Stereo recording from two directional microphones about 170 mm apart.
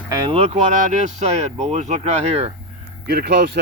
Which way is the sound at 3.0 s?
65° right (ahead or behind).